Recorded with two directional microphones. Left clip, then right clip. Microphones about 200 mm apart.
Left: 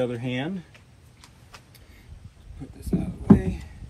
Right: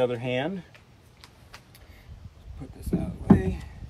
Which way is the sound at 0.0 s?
35° right (ahead or behind).